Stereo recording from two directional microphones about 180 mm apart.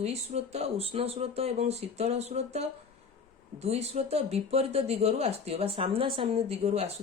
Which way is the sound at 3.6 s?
35° right (ahead or behind).